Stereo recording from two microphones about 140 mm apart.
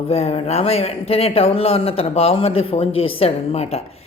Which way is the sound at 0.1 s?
45° left (ahead or behind).